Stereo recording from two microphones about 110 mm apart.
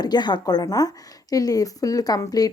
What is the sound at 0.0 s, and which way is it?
A woman's voice, 40° left (ahead or behind).